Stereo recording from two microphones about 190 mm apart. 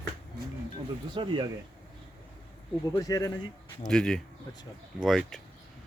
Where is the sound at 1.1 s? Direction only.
25° right (ahead or behind).